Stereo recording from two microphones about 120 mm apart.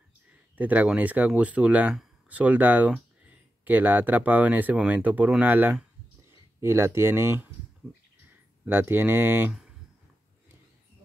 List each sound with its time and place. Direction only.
0.6 s speech: 10° right (ahead or behind)
8.6 s speech: 15° right (ahead or behind)